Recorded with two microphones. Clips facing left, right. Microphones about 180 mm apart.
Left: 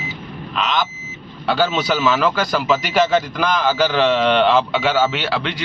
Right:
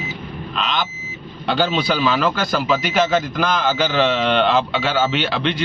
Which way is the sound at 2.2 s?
10° left (ahead or behind).